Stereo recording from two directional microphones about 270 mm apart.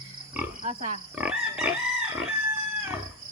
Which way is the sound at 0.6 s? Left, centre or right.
Right.